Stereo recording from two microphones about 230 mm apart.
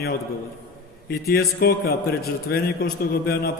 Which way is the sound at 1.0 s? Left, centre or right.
Left.